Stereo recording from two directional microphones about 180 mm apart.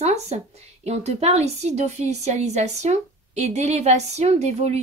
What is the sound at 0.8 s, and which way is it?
A woman's voice, 35° right (ahead or behind).